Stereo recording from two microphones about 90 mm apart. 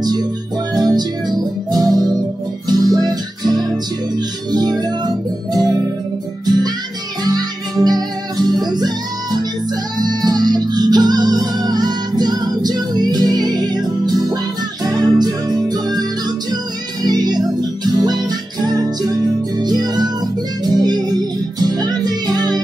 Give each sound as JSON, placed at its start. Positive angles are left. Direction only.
{"t": 0.0, "sound": "music", "side_deg": -50}
{"t": 7.3, "sound": "music", "side_deg": -50}
{"t": 10.0, "sound": "music", "side_deg": -50}
{"t": 19.6, "sound": "music", "side_deg": -50}